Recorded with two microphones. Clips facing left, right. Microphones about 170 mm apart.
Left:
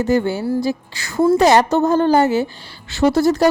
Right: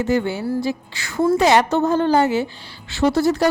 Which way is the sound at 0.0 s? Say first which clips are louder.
Left 3 dB; 40° left (ahead or behind).